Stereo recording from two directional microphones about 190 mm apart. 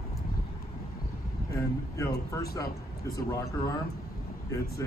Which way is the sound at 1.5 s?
15° left (ahead or behind).